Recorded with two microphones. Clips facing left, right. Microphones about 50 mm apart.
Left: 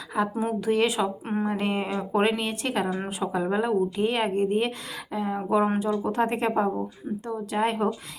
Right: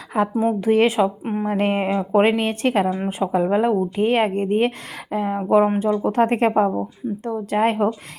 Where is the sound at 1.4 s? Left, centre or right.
Right.